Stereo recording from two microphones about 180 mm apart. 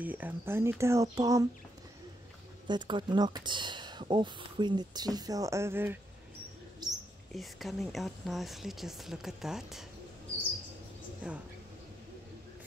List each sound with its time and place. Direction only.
0.0 s speech: 10° right (ahead or behind)
2.7 s speech: 25° right (ahead or behind)
6.8 s mouse: 20° right (ahead or behind)
7.3 s speech: centre (ahead or behind)
11.2 s speech: 5° right (ahead or behind)